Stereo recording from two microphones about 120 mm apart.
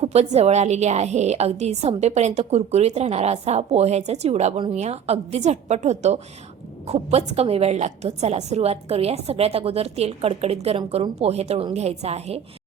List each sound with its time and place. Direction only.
0.0 s a woman's voice: 60° right (ahead or behind)